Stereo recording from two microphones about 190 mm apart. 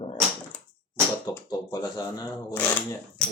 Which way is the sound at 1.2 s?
20° left (ahead or behind).